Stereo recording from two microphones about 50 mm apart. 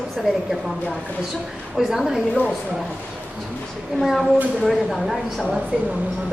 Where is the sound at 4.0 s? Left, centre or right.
Centre.